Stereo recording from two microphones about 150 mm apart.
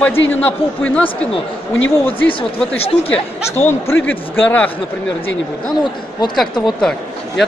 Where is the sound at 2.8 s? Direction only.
45° left (ahead or behind).